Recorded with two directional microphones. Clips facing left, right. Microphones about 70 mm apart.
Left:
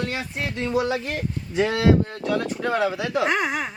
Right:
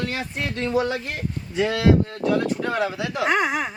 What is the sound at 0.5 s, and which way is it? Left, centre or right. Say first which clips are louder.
A man's voice: even; centre.